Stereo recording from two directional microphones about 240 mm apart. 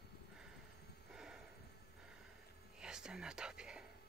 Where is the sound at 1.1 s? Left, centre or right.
Centre.